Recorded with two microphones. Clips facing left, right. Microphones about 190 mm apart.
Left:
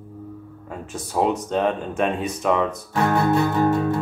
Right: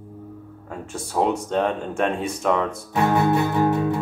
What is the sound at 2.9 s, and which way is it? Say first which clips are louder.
Music: even; 15° right (ahead or behind).